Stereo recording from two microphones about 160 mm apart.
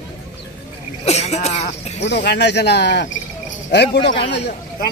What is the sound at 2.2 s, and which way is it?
Speech, 90° left.